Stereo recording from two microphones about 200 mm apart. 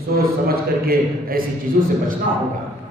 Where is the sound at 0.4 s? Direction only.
50° right (ahead or behind).